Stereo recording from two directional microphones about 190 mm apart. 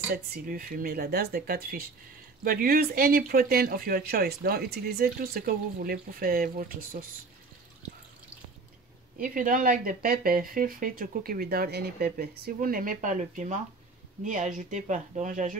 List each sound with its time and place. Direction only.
0.1 s speech: 50° right (ahead or behind)
9.2 s speech: 45° right (ahead or behind)